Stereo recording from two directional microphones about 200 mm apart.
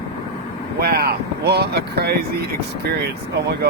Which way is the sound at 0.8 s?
50° right (ahead or behind).